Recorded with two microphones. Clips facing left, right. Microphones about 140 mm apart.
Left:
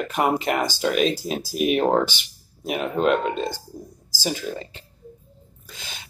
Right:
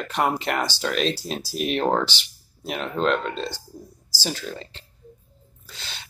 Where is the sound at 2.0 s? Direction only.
50° left (ahead or behind).